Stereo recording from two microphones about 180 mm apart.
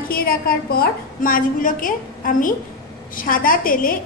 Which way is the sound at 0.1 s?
55° left (ahead or behind).